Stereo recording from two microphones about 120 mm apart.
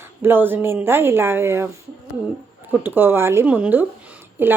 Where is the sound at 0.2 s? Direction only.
15° right (ahead or behind).